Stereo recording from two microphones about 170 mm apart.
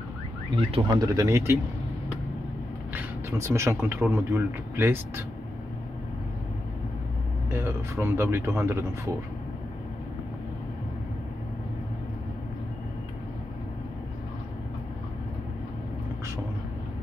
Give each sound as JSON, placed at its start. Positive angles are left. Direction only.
{"t": 0.6, "sound": "speech", "side_deg": -30}
{"t": 2.9, "sound": "speech", "side_deg": -15}
{"t": 7.4, "sound": "speech", "side_deg": -15}